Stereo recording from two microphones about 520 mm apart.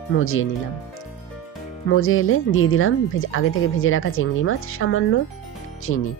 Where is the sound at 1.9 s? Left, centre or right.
Left.